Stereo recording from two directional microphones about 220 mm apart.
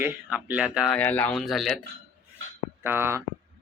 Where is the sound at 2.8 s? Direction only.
10° right (ahead or behind).